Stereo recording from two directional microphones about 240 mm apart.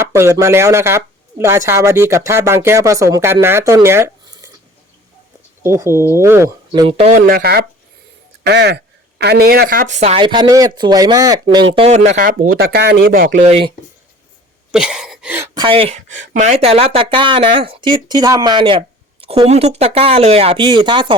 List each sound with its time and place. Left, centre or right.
0.0 s speech: centre
5.6 s speech: centre
14.7 s speech: centre; by 21.2 s right